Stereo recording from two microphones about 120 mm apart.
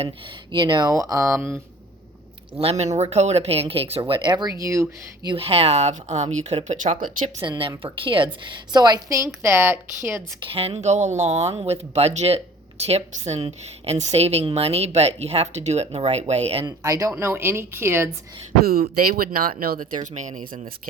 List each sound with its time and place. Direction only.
0.5 s speech: 40° right (ahead or behind)
0.9 s a woman's voice: 30° right (ahead or behind)
2.6 s speech: 60° right (ahead or behind); by 5.3 s 25° right (ahead or behind)
5.3 s speech: 55° right (ahead or behind); by 7.3 s 85° right
7.4 s a woman's voice: 40° right (ahead or behind); by 10.2 s 20° right (ahead or behind)
10.4 s speech: 50° right (ahead or behind)
16.6 s a woman's voice: 30° right (ahead or behind)
19.5 s speech: 90° right